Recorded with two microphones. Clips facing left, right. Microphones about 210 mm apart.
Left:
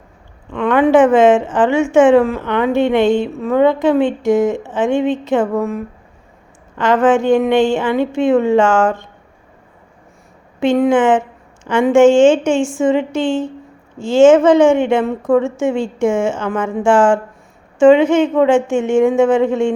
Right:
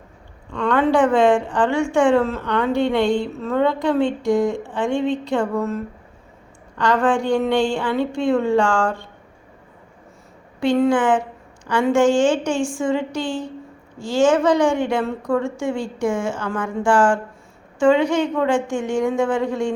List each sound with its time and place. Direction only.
0.5 s a woman's voice: 15° left (ahead or behind)
10.6 s a woman's voice: 20° left (ahead or behind)